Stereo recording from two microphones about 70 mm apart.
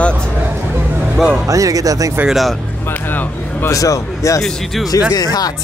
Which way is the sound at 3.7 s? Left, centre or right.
Left.